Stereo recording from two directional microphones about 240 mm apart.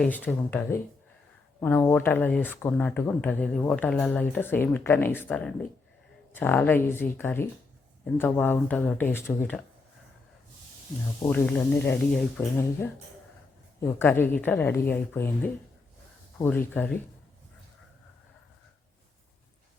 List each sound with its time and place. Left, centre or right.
0.0 s speech: centre
11.2 s speech: centre